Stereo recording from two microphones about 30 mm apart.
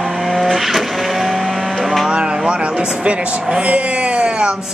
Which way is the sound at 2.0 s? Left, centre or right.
Right.